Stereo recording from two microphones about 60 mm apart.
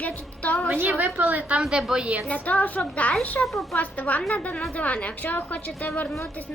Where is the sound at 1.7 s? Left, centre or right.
Centre.